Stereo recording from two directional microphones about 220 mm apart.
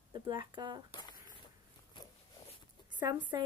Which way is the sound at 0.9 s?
20° left (ahead or behind).